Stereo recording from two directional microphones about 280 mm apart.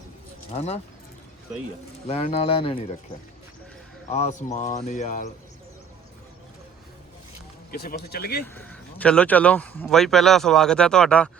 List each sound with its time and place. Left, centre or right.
0.5 s speech: left
2.0 s speech: left
4.1 s speech: left
7.7 s speech: left
8.5 s speech: centre